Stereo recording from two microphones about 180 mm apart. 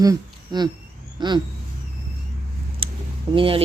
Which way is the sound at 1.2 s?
25° right (ahead or behind).